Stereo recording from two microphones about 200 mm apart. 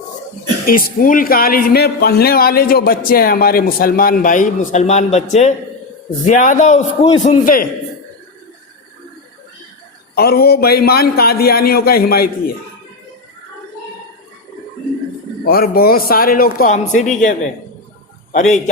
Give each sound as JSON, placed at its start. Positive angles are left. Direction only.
{"t": 0.6, "sound": "a man's voice", "side_deg": 45}
{"t": 10.2, "sound": "speech", "side_deg": 50}
{"t": 15.4, "sound": "a man's voice", "side_deg": 50}